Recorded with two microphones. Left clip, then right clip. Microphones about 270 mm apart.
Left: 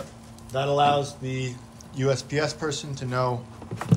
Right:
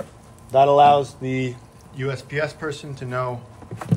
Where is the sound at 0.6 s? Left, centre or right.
Right.